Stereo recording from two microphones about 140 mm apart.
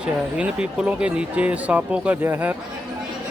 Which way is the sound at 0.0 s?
5° right (ahead or behind).